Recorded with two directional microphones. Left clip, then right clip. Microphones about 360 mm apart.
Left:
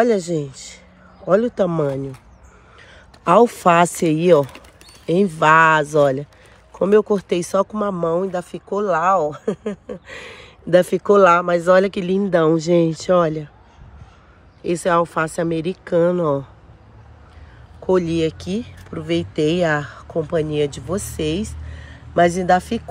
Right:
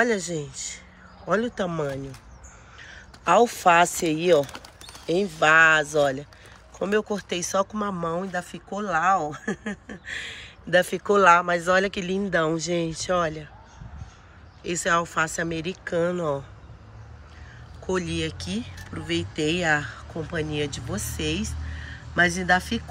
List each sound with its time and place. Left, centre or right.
0.0 s speech: centre
14.6 s speech: centre
17.8 s speech: centre